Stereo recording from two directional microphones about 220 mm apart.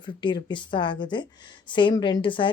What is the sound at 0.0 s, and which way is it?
A woman's voice, 20° left (ahead or behind).